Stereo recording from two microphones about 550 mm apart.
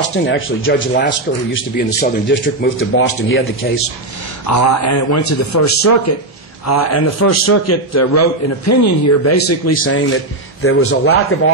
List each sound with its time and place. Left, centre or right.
0.0 s a man's voice: left